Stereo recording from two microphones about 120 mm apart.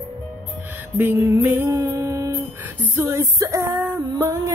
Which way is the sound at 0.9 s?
15° right (ahead or behind).